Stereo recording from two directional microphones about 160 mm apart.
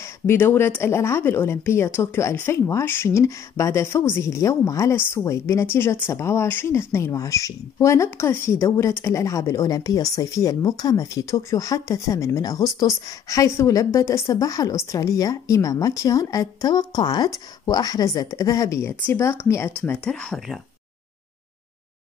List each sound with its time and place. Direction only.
0.0 s speech: 15° left (ahead or behind)